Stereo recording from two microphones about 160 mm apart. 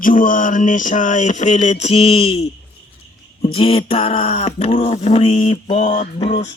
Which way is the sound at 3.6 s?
35° left (ahead or behind).